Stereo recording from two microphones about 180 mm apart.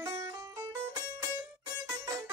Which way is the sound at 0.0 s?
20° right (ahead or behind).